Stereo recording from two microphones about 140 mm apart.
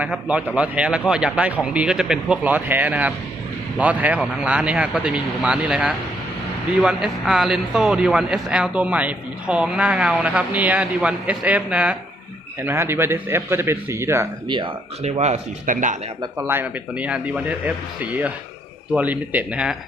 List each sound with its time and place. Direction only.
0.0 s speech: 10° right (ahead or behind)
14.4 s speech: 35° right (ahead or behind)
15.0 s speech: 55° right (ahead or behind); by 16.0 s 70° right (ahead or behind)
16.4 s speech: 15° right (ahead or behind)
18.9 s speech: 10° right (ahead or behind)